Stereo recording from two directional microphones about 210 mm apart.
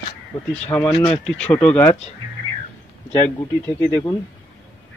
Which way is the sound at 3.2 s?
10° left (ahead or behind).